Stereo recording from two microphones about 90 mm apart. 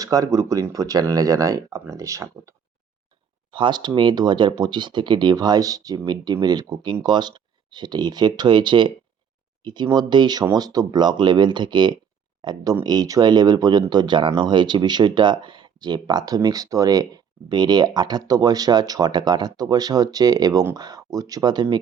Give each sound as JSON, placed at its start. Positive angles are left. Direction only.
{"t": 0.0, "sound": "speech", "side_deg": -40}
{"t": 3.5, "sound": "speech", "side_deg": -60}